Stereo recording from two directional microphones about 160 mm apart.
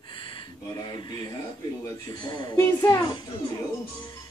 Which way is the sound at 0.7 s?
25° left (ahead or behind).